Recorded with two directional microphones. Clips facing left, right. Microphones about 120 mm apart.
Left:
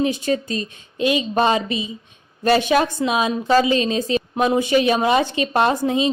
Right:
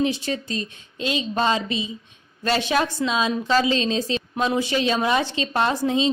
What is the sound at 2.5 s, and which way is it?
Speech, 50° left (ahead or behind).